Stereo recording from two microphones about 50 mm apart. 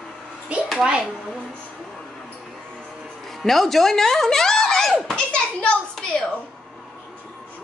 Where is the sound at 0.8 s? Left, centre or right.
Centre.